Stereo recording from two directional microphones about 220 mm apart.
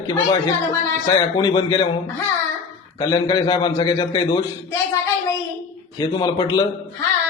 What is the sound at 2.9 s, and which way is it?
A man's voice, 20° left (ahead or behind).